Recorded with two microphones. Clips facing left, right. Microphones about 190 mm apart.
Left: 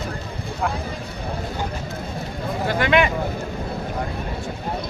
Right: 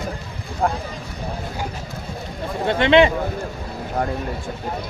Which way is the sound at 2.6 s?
25° right (ahead or behind).